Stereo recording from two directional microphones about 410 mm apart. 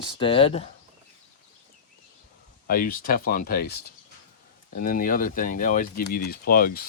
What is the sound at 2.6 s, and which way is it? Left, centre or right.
Speech, left.